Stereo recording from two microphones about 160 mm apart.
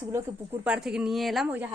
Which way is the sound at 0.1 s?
15° right (ahead or behind).